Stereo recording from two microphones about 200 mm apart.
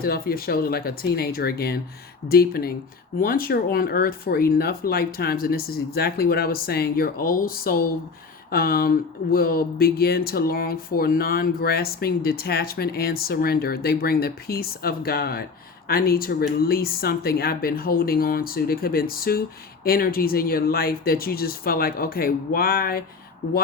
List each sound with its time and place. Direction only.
0.0 s speech: 50° left (ahead or behind)